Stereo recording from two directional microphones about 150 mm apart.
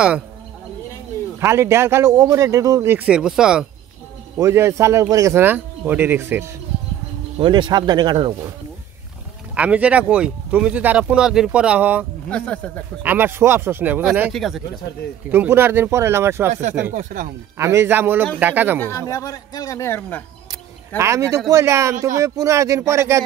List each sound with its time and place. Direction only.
1.4 s speech: 15° right (ahead or behind)
4.4 s speech: 20° right (ahead or behind)
7.3 s speech: 30° right (ahead or behind)
9.6 s speech: 10° right (ahead or behind)
12.3 s speech: 5° left (ahead or behind)
13.0 s speech: 15° right (ahead or behind)
14.3 s speech: centre (ahead or behind)
15.3 s speech: 15° right (ahead or behind)
16.9 s speech: 60° right (ahead or behind)
17.6 s speech: 20° right (ahead or behind)
18.8 s speech: 20° left (ahead or behind)
21.0 s speech: 20° right (ahead or behind)